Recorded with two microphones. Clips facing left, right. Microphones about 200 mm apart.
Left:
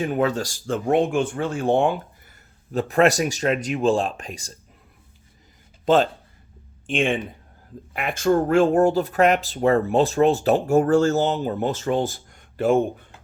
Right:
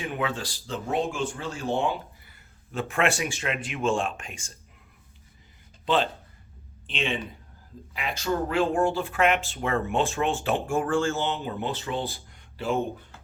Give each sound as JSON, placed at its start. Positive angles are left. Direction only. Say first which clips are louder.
{"t": 0.0, "sound": "speech", "louder": "left 8 dB", "side_deg": 40}
{"t": 2.7, "sound": "speech", "louder": "left 8 dB", "side_deg": 40}
{"t": 5.8, "sound": "speech", "louder": "left 7 dB", "side_deg": 45}